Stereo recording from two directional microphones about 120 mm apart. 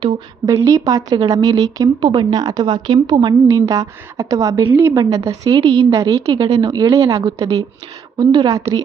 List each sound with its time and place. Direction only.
0.4 s a woman's voice: 30° right (ahead or behind)
5.5 s a woman's voice: 45° right (ahead or behind)
5.9 s a woman's voice: 25° right (ahead or behind)
6.3 s a woman's voice: 45° right (ahead or behind)
6.7 s a woman's voice: 30° right (ahead or behind)